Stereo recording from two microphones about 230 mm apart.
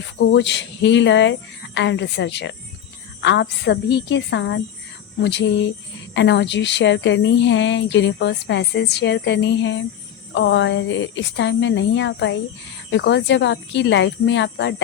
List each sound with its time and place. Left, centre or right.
0.2 s a woman's voice: left